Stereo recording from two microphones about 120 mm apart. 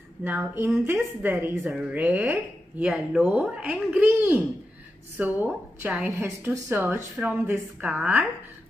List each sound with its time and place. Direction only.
0.2 s speech: 15° right (ahead or behind)
1.6 s speech: 10° right (ahead or behind)